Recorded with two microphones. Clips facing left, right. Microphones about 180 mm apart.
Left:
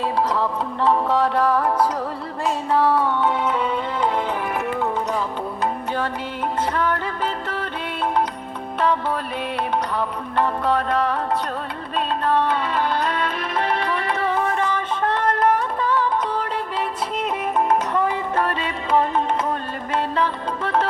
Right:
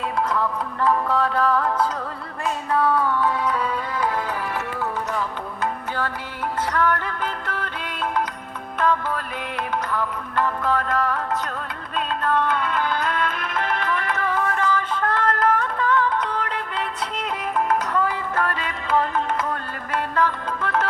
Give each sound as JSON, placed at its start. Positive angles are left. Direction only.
{"t": 0.2, "sound": "music", "side_deg": 30}
{"t": 6.7, "sound": "music", "side_deg": 15}
{"t": 8.8, "sound": "music", "side_deg": 25}
{"t": 15.2, "sound": "music", "side_deg": 15}
{"t": 17.6, "sound": "music", "side_deg": 25}